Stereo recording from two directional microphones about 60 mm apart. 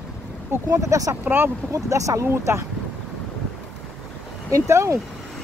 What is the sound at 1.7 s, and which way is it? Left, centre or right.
Speech, right.